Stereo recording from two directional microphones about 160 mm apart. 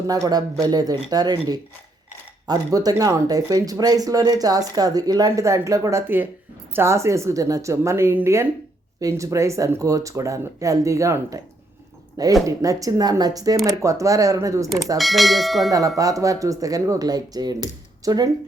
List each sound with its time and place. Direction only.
0.1 s a woman's voice: 25° right (ahead or behind)
12.5 s speech: 20° right (ahead or behind)
14.9 s speech: centre (ahead or behind)
16.0 s speech: 20° right (ahead or behind)